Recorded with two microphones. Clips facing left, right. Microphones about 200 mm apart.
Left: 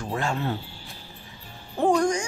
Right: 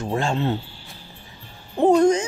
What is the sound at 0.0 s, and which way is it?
Speech, 25° right (ahead or behind).